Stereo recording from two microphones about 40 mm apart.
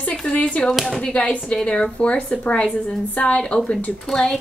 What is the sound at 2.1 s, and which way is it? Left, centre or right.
Speech, left.